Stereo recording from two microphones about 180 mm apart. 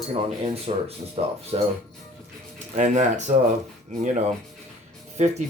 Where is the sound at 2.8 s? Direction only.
40° right (ahead or behind).